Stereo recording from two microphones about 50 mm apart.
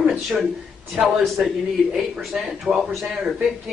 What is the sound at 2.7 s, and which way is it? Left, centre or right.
Speech, centre.